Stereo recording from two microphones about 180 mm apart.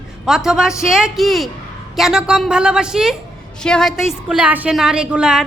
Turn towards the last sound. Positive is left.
turn(degrees=-5)  # may be behind; listen again after turning